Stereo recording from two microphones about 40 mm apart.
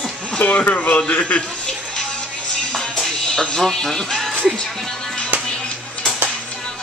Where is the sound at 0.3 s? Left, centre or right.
Left.